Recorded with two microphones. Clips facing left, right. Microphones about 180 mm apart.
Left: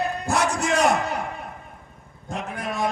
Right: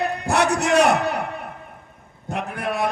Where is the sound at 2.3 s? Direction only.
65° right (ahead or behind).